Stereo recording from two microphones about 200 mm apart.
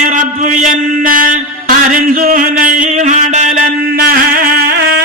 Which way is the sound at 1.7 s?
45° right (ahead or behind).